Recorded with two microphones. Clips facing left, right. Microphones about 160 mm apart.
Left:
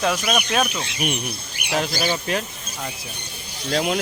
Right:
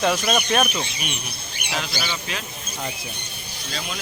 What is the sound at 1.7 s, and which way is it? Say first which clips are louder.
Speech: left 6 dB; 45° left (ahead or behind).